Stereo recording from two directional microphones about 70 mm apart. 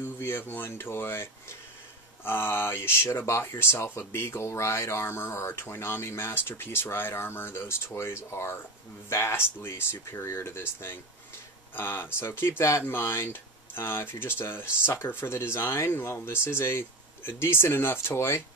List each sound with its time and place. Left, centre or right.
0.0 s speech: left